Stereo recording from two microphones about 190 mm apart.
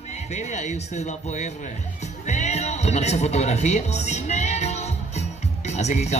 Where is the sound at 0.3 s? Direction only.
40° left (ahead or behind).